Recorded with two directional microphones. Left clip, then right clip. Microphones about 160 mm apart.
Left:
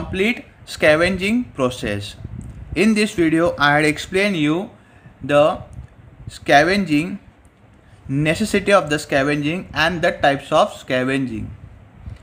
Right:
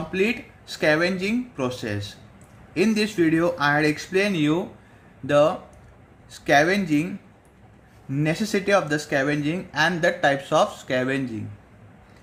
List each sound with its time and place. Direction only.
0.1 s speech: 30° left (ahead or behind)
8.1 s speech: 30° left (ahead or behind)